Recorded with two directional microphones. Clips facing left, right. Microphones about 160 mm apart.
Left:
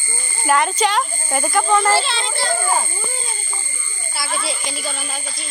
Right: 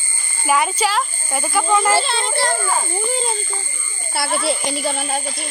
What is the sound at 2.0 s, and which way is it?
Speech, 55° right (ahead or behind).